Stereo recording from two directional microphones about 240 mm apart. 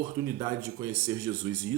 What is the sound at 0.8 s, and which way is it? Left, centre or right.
Speech, centre.